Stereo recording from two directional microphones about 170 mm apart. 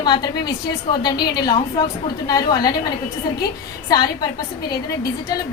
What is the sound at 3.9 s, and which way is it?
Speech, 25° left (ahead or behind).